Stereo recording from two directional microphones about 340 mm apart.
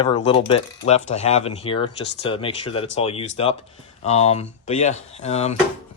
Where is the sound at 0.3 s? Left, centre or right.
Centre.